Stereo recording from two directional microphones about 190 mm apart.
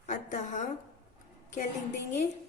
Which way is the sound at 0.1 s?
40° left (ahead or behind).